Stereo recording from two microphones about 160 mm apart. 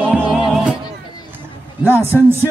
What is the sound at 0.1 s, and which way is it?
Music, 10° right (ahead or behind).